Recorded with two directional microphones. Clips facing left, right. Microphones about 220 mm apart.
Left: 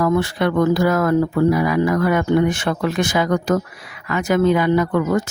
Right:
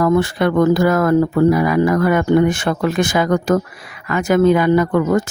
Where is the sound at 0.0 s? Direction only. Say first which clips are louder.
Right 3 dB; 50° right (ahead or behind).